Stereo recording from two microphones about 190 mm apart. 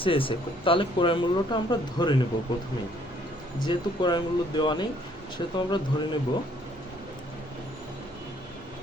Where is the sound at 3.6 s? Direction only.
25° left (ahead or behind).